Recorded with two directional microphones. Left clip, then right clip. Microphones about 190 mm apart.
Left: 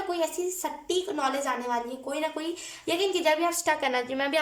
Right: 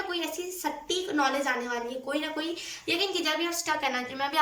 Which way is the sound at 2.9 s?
35° left (ahead or behind).